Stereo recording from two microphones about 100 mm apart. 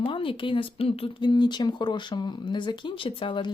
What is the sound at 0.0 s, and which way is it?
Speech, 60° left (ahead or behind).